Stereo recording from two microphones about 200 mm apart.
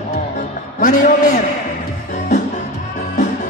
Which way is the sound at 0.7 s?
40° left (ahead or behind).